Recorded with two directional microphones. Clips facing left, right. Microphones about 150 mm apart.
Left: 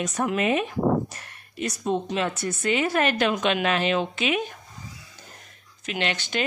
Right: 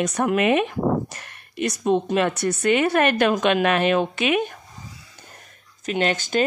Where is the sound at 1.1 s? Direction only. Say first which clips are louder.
Right 3 dB; 75° right (ahead or behind); by 4.4 s 55° right (ahead or behind).